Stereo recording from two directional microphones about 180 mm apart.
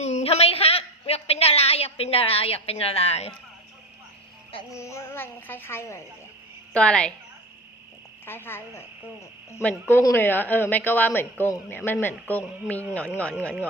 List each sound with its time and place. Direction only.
0.0 s a sound: 35° left (ahead or behind)
4.7 s a woman's voice: 15° left (ahead or behind)
8.2 s speech: 10° left (ahead or behind)